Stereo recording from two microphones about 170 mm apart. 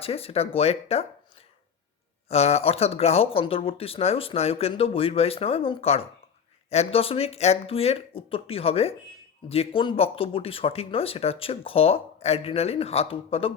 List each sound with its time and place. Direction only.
0.0 s speech: 35° left (ahead or behind)
2.3 s speech: 40° left (ahead or behind)